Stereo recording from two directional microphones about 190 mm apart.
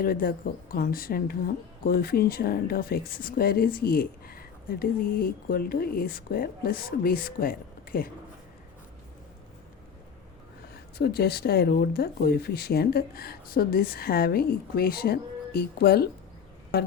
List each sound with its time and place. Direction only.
0.0 s a woman's voice: 50° left (ahead or behind)
10.9 s a woman's voice: 55° left (ahead or behind)